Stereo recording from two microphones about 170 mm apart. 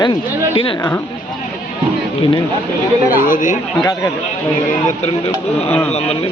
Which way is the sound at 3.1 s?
55° left (ahead or behind).